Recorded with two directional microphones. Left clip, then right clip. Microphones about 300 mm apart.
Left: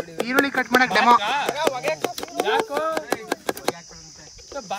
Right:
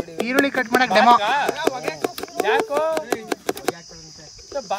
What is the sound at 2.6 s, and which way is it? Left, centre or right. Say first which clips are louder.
Speech: right 3 dB; centre.